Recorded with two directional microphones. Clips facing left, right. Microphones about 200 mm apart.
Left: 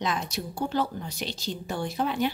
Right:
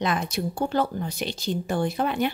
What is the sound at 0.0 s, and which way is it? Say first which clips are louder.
Speech: right 4 dB; 55° right (ahead or behind).